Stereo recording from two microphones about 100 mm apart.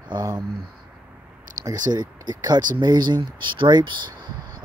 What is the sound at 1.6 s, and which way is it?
Speech, 40° right (ahead or behind).